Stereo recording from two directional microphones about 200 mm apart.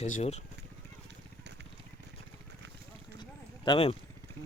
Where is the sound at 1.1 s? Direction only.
60° right (ahead or behind).